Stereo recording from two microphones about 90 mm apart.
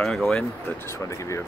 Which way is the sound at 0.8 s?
35° left (ahead or behind).